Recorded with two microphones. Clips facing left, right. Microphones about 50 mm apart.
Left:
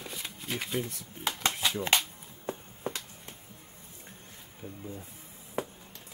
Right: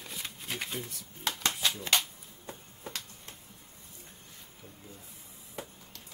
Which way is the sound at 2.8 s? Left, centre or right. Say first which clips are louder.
Left 6 dB; left.